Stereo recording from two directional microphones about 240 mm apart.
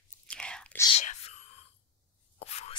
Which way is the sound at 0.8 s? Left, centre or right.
Left.